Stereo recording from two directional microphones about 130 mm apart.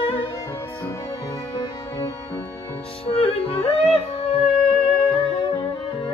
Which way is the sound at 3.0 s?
50° left (ahead or behind).